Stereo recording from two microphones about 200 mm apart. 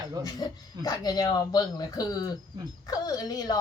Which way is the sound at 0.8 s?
20° left (ahead or behind).